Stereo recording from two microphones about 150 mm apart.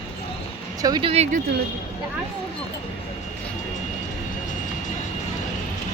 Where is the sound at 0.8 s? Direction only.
25° right (ahead or behind).